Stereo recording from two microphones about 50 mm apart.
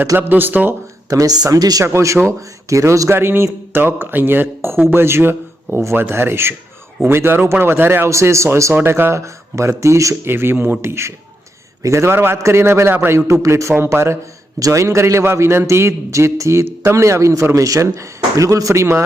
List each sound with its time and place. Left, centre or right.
0.0 s speech: right
1.5 s a man's voice: right
2.2 s speech: right
3.2 s a man's voice: right
8.0 s speech: right
8.8 s speech: right
9.2 s speech: right
10.2 s speech: right
10.8 s speech: right
11.8 s speech: right
12.4 s a man's voice: right
13.7 s speech: right
14.7 s a man's voice: right